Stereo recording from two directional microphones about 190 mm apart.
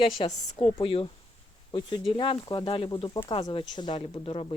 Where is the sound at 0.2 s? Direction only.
30° left (ahead or behind).